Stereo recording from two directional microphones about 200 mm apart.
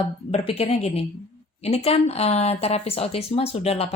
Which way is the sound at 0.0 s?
30° left (ahead or behind).